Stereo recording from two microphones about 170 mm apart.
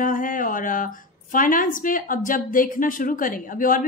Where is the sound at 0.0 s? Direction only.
55° left (ahead or behind).